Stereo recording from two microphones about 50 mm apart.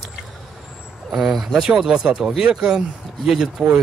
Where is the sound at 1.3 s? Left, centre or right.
Centre.